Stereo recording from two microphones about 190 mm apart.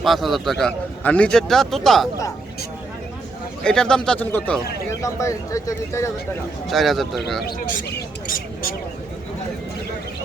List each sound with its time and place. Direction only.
0.0 s a man's voice: centre (ahead or behind)
3.6 s a man's voice: 5° left (ahead or behind)
6.7 s a man's voice: centre (ahead or behind)
7.4 s speech: 50° left (ahead or behind)